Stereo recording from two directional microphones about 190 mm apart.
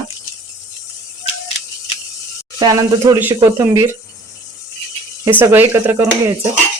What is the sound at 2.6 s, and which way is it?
Speech, 20° right (ahead or behind).